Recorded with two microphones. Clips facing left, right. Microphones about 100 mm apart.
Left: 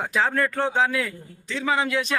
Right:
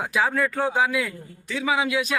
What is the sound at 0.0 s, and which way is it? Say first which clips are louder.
A man's voice: even; 5° right (ahead or behind).